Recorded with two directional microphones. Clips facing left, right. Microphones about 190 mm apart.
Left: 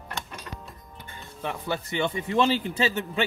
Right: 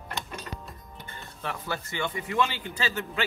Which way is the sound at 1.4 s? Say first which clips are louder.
Left 4 dB; 20° left (ahead or behind).